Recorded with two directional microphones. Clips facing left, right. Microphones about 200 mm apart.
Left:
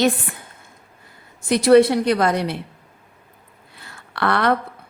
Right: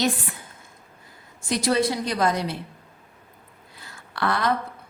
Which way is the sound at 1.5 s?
60° left (ahead or behind).